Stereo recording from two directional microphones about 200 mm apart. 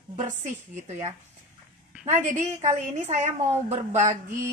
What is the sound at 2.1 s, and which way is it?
A woman's voice, 40° right (ahead or behind).